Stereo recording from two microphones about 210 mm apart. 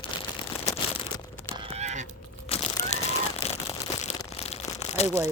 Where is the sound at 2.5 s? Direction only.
25° left (ahead or behind).